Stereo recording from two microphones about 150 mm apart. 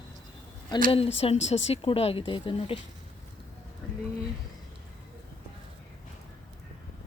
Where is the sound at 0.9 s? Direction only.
40° left (ahead or behind).